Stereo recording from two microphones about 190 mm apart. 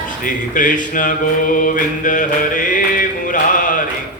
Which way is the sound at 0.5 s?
45° left (ahead or behind).